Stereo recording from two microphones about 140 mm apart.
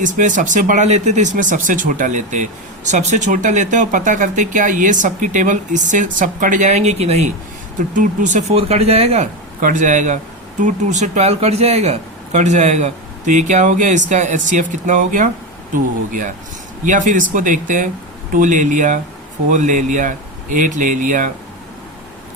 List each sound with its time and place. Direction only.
0.0 s speech: 65° right (ahead or behind)